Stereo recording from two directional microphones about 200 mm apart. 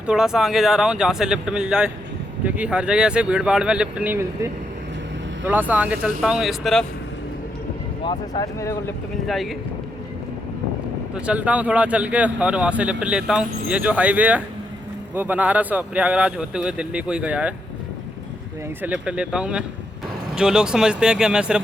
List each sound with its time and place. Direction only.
0.1 s speech: 5° right (ahead or behind)
5.5 s a man's voice: 10° right (ahead or behind)
8.0 s speech: 20° left (ahead or behind)
9.2 s speech: centre (ahead or behind)
11.1 s a man's voice: 5° right (ahead or behind)
18.8 s speech: 5° right (ahead or behind)